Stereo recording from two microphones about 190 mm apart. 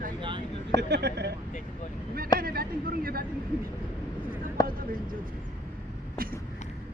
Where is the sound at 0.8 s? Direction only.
60° right (ahead or behind).